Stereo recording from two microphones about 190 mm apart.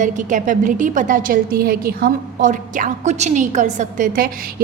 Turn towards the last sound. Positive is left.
turn(degrees=-45)  # may be behind; listen again after turning